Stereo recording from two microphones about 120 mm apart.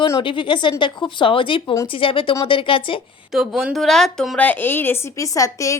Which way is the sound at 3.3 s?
5° right (ahead or behind).